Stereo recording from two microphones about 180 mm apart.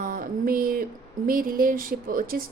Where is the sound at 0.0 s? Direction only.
50° right (ahead or behind).